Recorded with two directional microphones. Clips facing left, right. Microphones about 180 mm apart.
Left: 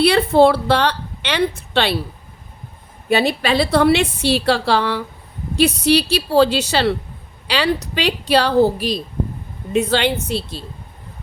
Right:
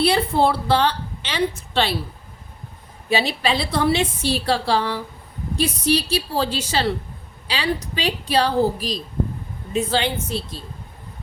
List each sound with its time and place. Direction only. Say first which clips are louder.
0.0 s a woman's voice: left 6 dB; 75° left (ahead or behind)
3.1 s a woman's voice: left 4 dB; 55° left (ahead or behind); by 10.6 s 75° left (ahead or behind)